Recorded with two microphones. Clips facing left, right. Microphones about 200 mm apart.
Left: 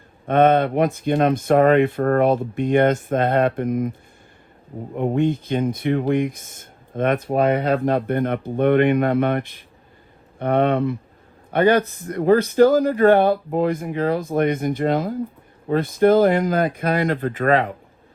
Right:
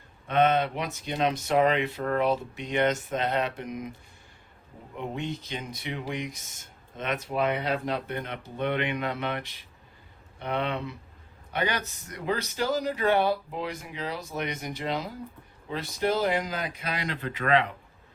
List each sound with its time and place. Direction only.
0.3 s speech: 50° left (ahead or behind)
4.9 s speech: 55° left (ahead or behind)